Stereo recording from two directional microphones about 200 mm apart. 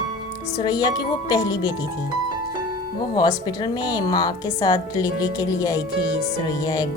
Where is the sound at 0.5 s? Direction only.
20° left (ahead or behind).